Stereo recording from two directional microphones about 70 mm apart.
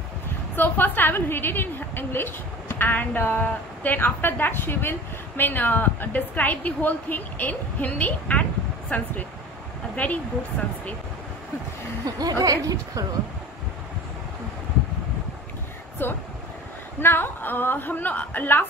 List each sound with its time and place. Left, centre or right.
0.6 s a woman's voice: left
12.0 s speech: right
16.0 s a woman's voice: left